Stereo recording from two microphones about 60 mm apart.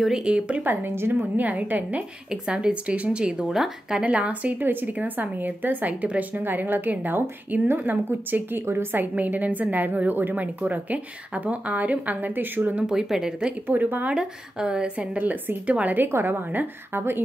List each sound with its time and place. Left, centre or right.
0.0 s a woman's voice: centre
0.7 s a woman's voice: right
1.4 s a woman's voice: right; by 4.0 s centre
4.0 s a woman's voice: right
9.0 s a woman's voice: right
12.8 s a woman's voice: centre
13.7 s a woman's voice: right
14.1 s a woman's voice: centre
15.1 s a woman's voice: right
16.1 s a woman's voice: right